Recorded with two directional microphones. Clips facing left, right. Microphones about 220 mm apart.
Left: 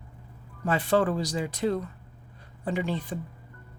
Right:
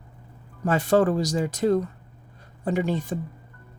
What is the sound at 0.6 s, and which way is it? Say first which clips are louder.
Speech: right 4 dB; 45° right (ahead or behind).